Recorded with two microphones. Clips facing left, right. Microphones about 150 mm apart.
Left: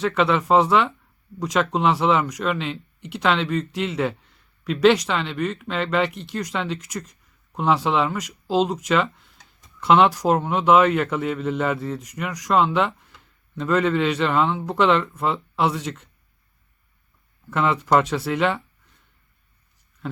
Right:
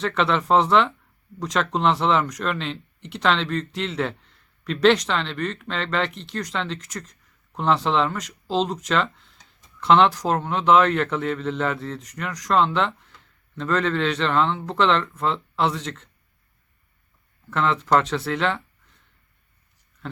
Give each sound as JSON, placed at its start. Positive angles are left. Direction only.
{"t": 0.0, "sound": "speech", "side_deg": 5}
{"t": 17.5, "sound": "speech", "side_deg": 10}